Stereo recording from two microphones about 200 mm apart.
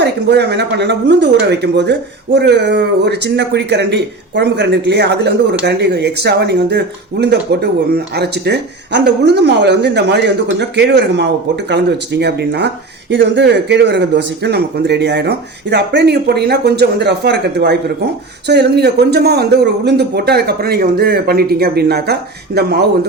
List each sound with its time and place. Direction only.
0.0 s speech: 55° right (ahead or behind)